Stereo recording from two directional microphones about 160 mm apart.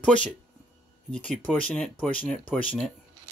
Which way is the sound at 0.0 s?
5° left (ahead or behind).